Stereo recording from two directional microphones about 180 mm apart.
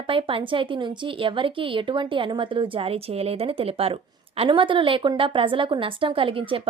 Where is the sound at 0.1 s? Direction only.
30° right (ahead or behind).